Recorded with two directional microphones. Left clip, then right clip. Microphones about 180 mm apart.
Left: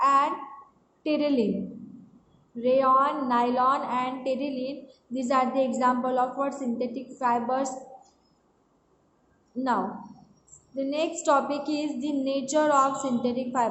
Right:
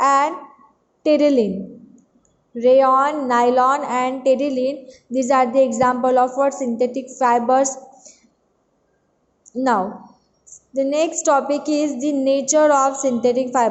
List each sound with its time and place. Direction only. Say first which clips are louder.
0.0 s a sound: right 6 dB; 40° right (ahead or behind)
1.0 s a woman's voice: right 10 dB; 40° right (ahead or behind)
2.6 s a woman's voice: right 8 dB; 40° right (ahead or behind)
10.8 s a woman's voice: right 10 dB; 35° right (ahead or behind)